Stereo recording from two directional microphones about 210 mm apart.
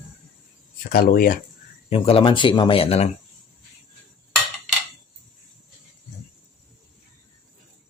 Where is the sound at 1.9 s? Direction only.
25° left (ahead or behind).